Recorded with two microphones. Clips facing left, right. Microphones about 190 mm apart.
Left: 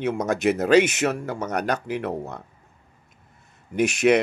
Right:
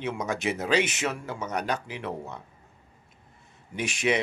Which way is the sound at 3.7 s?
45° left (ahead or behind).